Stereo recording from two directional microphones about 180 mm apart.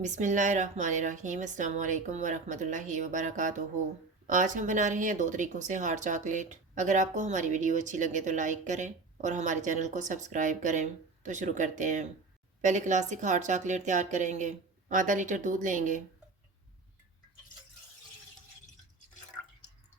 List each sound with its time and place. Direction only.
0.0 s speech: 45° right (ahead or behind)